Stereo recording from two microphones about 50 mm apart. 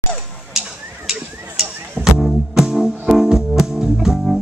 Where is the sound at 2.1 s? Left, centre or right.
Centre.